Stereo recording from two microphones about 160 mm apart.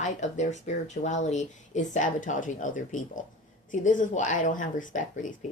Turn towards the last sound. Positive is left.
turn(degrees=55)  # may be behind; listen again after turning